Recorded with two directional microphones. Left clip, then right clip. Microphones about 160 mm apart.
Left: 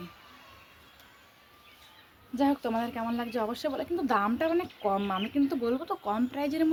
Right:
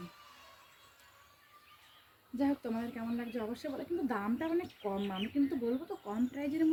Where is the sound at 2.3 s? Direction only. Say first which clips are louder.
Left 7 dB; 15° right (ahead or behind).